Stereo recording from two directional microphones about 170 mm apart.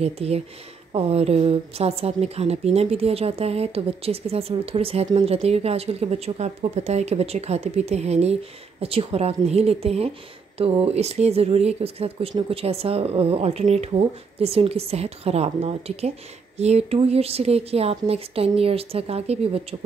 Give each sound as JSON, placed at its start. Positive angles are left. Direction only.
{"t": 0.0, "sound": "a woman's voice", "side_deg": -35}